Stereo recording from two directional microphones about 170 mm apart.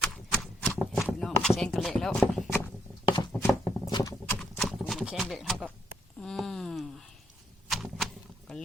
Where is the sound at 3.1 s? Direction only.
20° left (ahead or behind).